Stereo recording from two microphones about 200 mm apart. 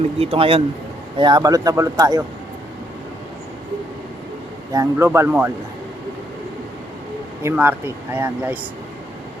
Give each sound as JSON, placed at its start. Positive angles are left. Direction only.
{"t": 0.2, "sound": "speech", "side_deg": -30}
{"t": 4.7, "sound": "speech", "side_deg": -15}
{"t": 7.4, "sound": "speech", "side_deg": -10}